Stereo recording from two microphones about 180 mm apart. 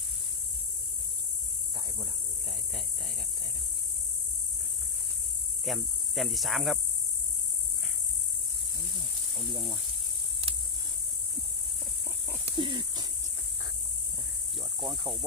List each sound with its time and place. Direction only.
5.6 s cricket: centre (ahead or behind)
12.5 s a sound: 25° right (ahead or behind)
14.8 s speech: centre (ahead or behind)